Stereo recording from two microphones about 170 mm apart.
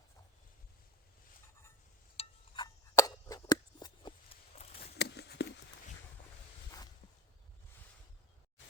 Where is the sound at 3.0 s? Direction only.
20° left (ahead or behind).